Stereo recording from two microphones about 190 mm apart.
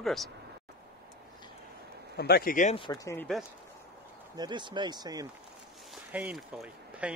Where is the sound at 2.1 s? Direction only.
55° left (ahead or behind).